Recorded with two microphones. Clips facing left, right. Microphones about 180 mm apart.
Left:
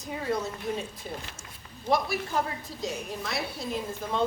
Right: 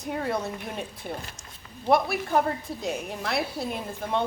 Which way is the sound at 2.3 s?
60° right (ahead or behind).